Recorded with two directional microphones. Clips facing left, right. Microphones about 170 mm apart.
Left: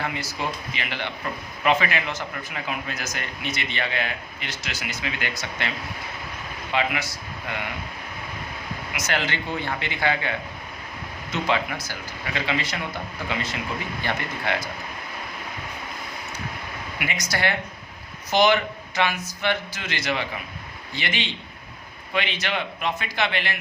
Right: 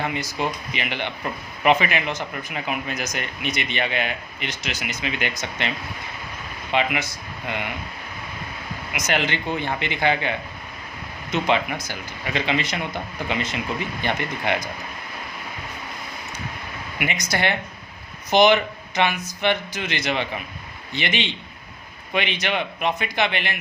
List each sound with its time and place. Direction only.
0.0 s a man's voice: 20° right (ahead or behind)
6.7 s a man's voice: 20° right (ahead or behind)
9.0 s a man's voice: 20° right (ahead or behind)
17.0 s a man's voice: 20° right (ahead or behind)